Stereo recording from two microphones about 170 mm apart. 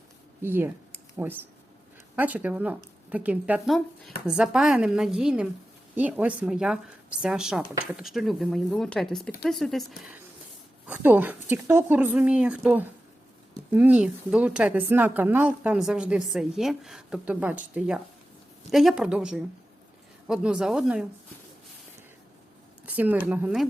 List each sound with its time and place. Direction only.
0.4 s a woman's voice: 15° right (ahead or behind)
10.8 s a woman's voice: 10° right (ahead or behind)
22.9 s a woman's voice: 10° right (ahead or behind)